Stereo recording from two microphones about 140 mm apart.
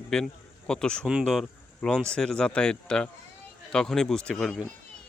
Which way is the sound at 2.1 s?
5° left (ahead or behind).